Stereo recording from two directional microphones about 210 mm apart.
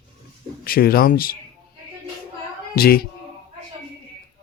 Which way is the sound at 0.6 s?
45° left (ahead or behind).